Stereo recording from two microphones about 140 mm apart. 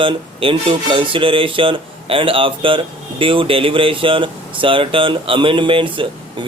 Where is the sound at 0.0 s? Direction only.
40° right (ahead or behind).